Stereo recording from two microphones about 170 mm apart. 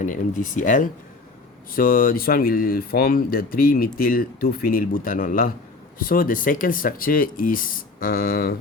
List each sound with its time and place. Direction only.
0.0 s speech: 50° left (ahead or behind)